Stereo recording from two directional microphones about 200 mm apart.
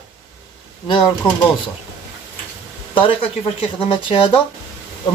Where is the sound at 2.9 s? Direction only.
25° left (ahead or behind).